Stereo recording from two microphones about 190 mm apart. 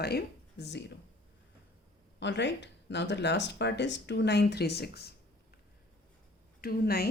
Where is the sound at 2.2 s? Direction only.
65° left (ahead or behind).